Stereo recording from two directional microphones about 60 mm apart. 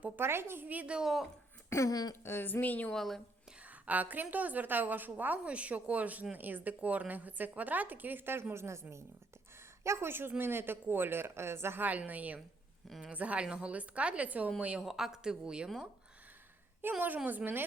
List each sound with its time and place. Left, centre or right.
0.2 s a woman's voice: right
0.7 s a woman's voice: right
0.9 s speech: centre
1.7 s throat clearing: left
2.2 s speech: left
2.9 s speech: centre
3.7 s a woman's voice: right
11.8 s a woman's voice: right
14.8 s speech: centre
16.8 s a woman's voice: right